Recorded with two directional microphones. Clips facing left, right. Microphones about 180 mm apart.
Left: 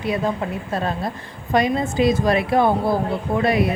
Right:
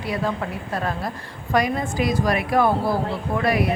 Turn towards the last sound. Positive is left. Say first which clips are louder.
# left 2 dB
turn(degrees=25)  # may be behind; listen again after turning